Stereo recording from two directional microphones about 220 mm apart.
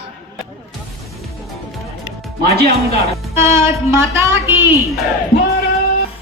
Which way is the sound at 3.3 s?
10° right (ahead or behind).